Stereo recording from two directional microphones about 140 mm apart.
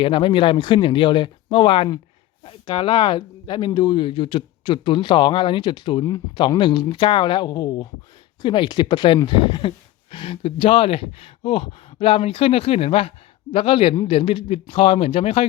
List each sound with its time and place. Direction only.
0.0 s speech: 35° left (ahead or behind)